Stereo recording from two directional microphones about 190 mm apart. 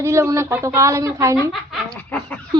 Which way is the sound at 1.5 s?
5° left (ahead or behind).